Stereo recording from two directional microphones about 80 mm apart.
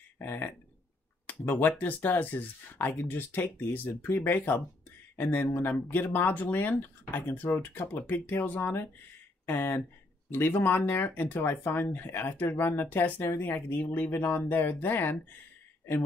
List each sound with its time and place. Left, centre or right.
0.2 s speech: left